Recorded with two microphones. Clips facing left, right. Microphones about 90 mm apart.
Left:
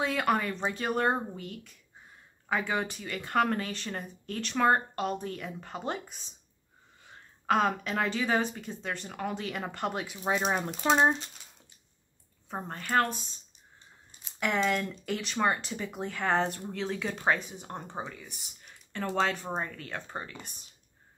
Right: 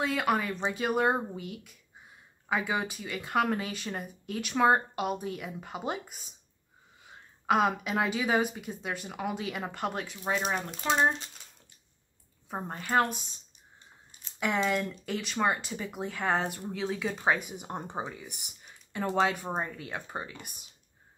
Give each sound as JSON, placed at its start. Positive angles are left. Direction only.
{"t": 0.0, "sound": "speech", "side_deg": 0}
{"t": 10.1, "sound": "speech", "side_deg": 15}
{"t": 12.4, "sound": "speech", "side_deg": -5}
{"t": 14.4, "sound": "speech", "side_deg": -5}